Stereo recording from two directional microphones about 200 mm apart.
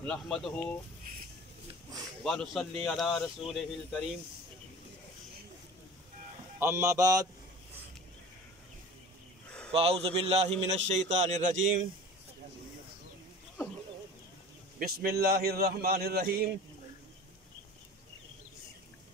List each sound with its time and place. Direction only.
0.0 s speech: 5° left (ahead or behind)
2.2 s speech: centre (ahead or behind)
6.6 s speech: 15° right (ahead or behind)
9.7 s a man's voice: 30° right (ahead or behind)
14.8 s a man's voice: 45° right (ahead or behind)